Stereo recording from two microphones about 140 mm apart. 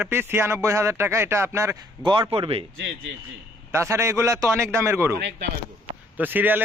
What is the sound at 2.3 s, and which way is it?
Speech, 45° right (ahead or behind).